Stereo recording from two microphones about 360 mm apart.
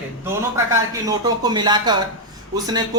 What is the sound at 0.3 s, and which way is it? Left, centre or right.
Speech, centre.